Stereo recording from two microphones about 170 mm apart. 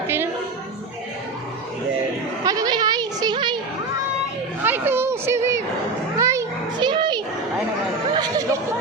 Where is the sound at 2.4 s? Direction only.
20° right (ahead or behind).